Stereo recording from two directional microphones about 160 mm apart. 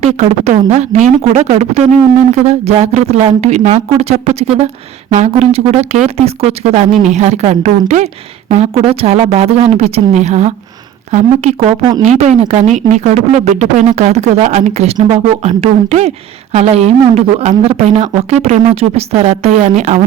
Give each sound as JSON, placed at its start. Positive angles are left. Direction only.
{"t": 0.0, "sound": "a woman's voice", "side_deg": -45}